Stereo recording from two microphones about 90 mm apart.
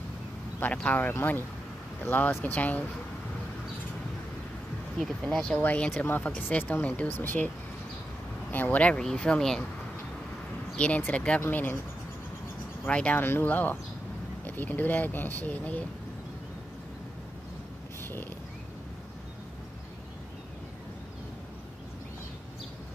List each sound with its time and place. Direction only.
0.6 s speech: 20° left (ahead or behind)
5.3 s speech: 5° left (ahead or behind)
5.6 s speech: 20° left (ahead or behind)
11.0 s speech: 15° left (ahead or behind)
12.8 s speech: 15° left (ahead or behind)
18.0 s a sound: 25° left (ahead or behind)